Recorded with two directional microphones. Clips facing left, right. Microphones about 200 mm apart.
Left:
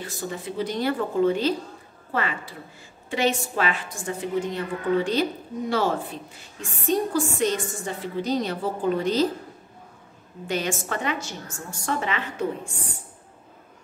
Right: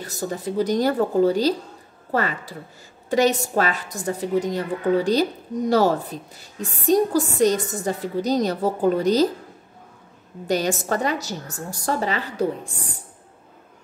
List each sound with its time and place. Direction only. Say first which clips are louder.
0.0 s a woman's voice: right 4 dB; 40° right (ahead or behind)
10.4 s a woman's voice: right 5 dB; 40° right (ahead or behind)